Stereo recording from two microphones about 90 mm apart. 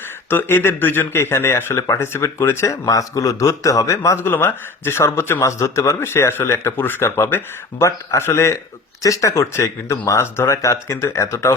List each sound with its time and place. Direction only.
0.3 s speech: 25° left (ahead or behind)